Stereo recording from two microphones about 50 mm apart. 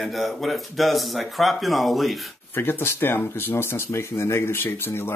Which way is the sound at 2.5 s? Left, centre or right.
Left.